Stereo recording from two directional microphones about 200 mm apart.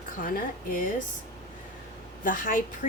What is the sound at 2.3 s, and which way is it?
Speech, 45° left (ahead or behind).